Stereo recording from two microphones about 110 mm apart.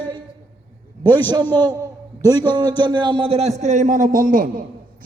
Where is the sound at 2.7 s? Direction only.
40° right (ahead or behind); by 4.1 s 90° right.